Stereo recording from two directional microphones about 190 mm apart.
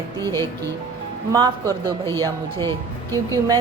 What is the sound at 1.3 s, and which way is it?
A woman's voice, 20° right (ahead or behind).